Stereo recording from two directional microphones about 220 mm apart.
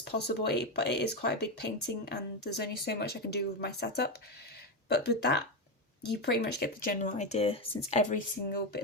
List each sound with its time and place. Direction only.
0.0 s speech: 50° left (ahead or behind); by 8.2 s 30° left (ahead or behind)